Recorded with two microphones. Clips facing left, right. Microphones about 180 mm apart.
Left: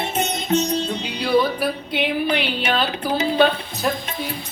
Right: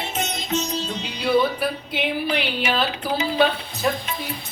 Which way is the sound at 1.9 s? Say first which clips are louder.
Left 4 dB; centre (ahead or behind).